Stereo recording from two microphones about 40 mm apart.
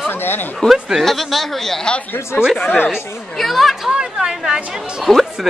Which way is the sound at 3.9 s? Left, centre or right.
Centre.